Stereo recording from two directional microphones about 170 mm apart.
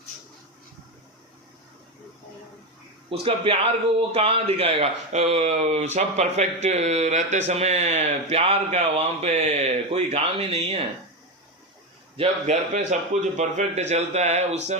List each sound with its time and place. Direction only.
3.1 s speech: 35° right (ahead or behind)
12.1 s speech: 40° right (ahead or behind)